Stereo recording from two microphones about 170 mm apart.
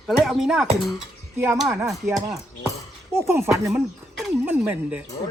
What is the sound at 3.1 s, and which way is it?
Speech, 15° right (ahead or behind).